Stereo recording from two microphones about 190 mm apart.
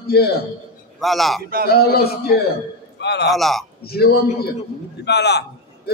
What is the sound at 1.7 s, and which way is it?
A man's voice, 55° left (ahead or behind).